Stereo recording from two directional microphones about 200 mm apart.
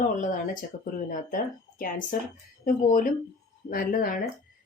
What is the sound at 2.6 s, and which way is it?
Speech, 45° left (ahead or behind).